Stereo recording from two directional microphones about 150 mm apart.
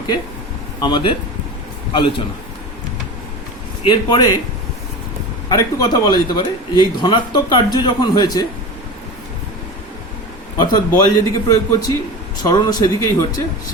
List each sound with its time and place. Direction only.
0.8 s speech: 30° left (ahead or behind)
3.8 s a man's voice: 30° left (ahead or behind)
5.5 s a man's voice: 25° left (ahead or behind)
10.6 s a man's voice: 30° left (ahead or behind)